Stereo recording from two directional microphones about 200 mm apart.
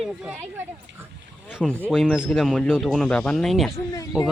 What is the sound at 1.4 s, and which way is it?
Speech, centre (ahead or behind).